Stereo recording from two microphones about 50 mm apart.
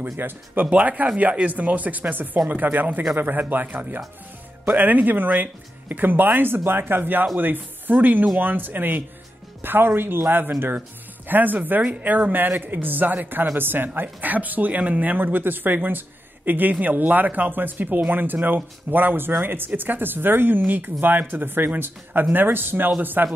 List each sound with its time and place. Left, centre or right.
0.2 s speech: right
0.7 s speech: right